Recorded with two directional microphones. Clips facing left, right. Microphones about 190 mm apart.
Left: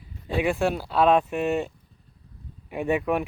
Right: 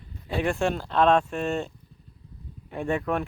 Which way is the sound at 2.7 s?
10° left (ahead or behind).